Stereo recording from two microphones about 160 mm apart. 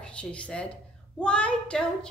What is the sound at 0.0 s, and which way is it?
A woman's voice, 5° left (ahead or behind).